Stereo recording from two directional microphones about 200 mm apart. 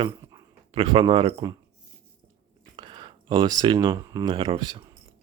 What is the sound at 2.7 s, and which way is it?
Speech, 25° right (ahead or behind).